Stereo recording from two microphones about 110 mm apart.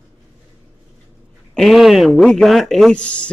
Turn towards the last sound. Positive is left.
turn(degrees=10)  # may be behind; listen again after turning